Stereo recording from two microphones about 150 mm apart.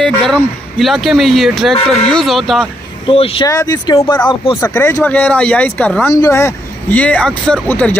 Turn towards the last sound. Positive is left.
turn(degrees=10)  # may be behind; listen again after turning